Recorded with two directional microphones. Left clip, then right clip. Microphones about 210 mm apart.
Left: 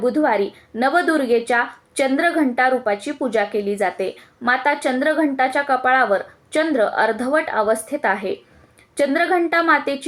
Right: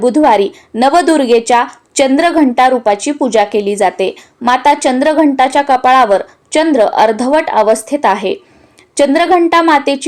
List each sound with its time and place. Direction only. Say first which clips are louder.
0.0 s a woman's voice: right 9 dB; 30° right (ahead or behind)